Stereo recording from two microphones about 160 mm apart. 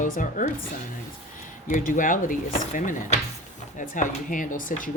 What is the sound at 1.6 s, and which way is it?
A woman's voice, 55° left (ahead or behind).